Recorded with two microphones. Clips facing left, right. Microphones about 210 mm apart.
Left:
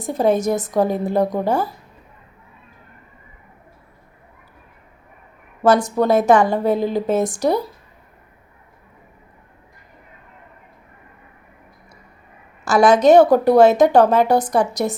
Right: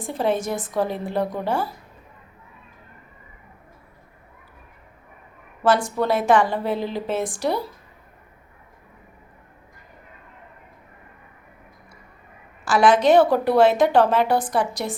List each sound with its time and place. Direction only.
0.0 s a woman's voice: 40° left (ahead or behind)
5.6 s a woman's voice: 45° left (ahead or behind)
12.6 s a woman's voice: 45° left (ahead or behind)